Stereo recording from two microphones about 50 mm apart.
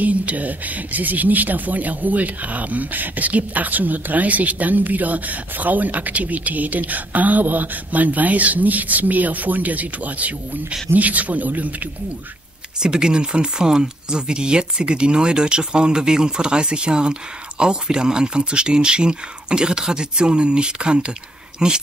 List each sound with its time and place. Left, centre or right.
0.0 s speech: right
12.8 s speech: centre